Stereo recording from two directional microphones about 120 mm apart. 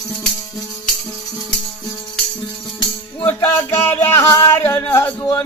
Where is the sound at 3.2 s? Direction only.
20° left (ahead or behind).